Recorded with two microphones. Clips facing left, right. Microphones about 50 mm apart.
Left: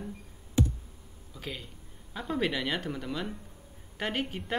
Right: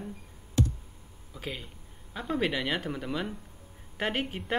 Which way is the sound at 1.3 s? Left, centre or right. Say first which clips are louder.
Right 2 dB; centre.